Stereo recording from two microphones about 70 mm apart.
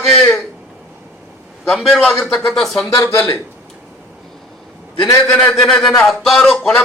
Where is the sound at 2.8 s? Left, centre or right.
Left.